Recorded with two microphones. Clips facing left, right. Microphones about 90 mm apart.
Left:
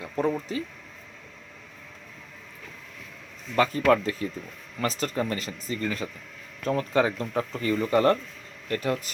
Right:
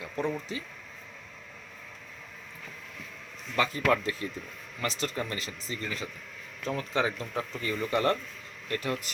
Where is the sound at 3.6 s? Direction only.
40° left (ahead or behind).